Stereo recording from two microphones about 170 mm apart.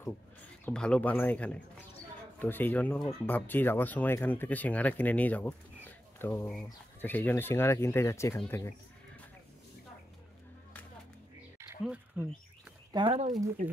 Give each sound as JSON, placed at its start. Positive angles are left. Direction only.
{"t": 0.7, "sound": "speech", "side_deg": 5}
{"t": 11.8, "sound": "speech", "side_deg": -5}
{"t": 12.9, "sound": "speech", "side_deg": -35}